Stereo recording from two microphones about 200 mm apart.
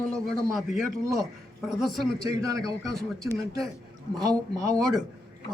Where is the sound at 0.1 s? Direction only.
Centre (ahead or behind).